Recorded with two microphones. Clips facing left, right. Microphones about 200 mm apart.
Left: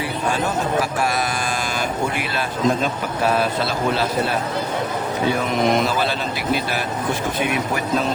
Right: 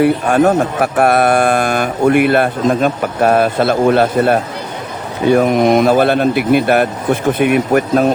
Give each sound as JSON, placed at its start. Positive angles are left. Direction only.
{"t": 0.0, "sound": "a man's voice", "side_deg": -60}